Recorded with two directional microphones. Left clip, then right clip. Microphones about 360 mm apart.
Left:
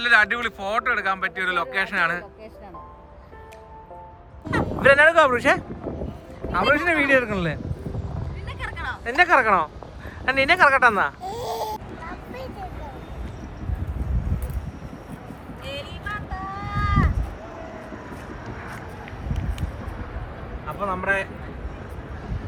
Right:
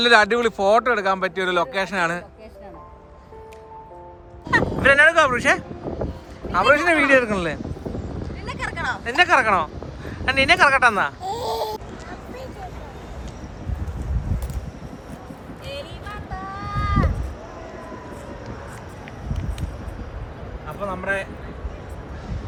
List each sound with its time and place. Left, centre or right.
0.0 s speech: centre
4.8 s speech: centre
8.4 s a sound: centre
9.0 s speech: centre
15.6 s run: centre
20.7 s speech: centre